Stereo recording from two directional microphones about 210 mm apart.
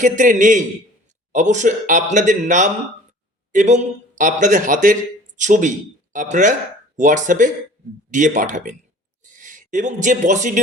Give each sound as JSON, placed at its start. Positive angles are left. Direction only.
{"t": 0.0, "sound": "a man's voice", "side_deg": -35}